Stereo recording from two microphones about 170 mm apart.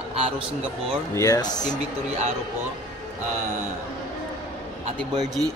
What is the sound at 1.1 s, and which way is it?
Speech, 20° left (ahead or behind).